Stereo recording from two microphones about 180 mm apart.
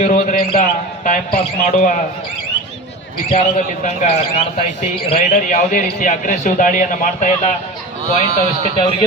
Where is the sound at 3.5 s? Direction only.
45° left (ahead or behind).